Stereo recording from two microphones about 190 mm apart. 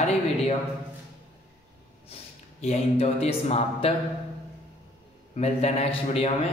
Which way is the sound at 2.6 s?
35° left (ahead or behind).